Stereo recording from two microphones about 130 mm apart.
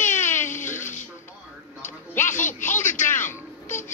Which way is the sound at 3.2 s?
75° left (ahead or behind).